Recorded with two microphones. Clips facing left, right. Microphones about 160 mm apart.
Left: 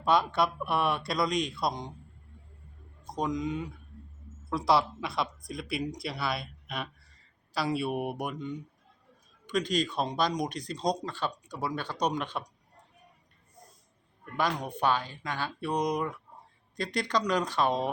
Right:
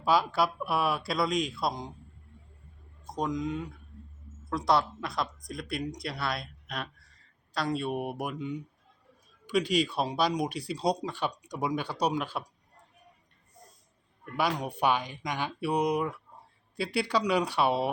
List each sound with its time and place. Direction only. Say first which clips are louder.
0.0 s speech: even; 5° right (ahead or behind)
3.1 s speech: even; centre (ahead or behind)
14.3 s speech: right 1 dB; 10° right (ahead or behind)